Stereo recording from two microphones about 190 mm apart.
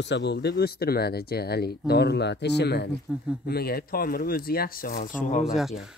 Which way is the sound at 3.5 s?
55° left (ahead or behind).